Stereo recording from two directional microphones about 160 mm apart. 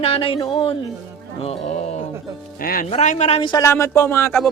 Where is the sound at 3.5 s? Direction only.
20° left (ahead or behind).